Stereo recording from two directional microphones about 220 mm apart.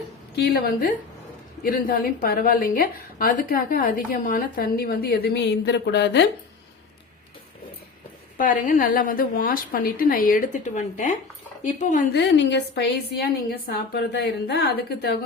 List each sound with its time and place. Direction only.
0.3 s a woman's voice: 50° left (ahead or behind)
8.4 s a woman's voice: 40° left (ahead or behind)
12.1 s a woman's voice: 50° left (ahead or behind)